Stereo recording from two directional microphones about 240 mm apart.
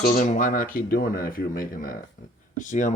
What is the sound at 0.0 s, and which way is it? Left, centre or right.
Speech, left.